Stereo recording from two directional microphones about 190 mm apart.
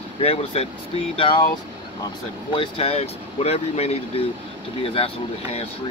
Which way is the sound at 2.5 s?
30° left (ahead or behind).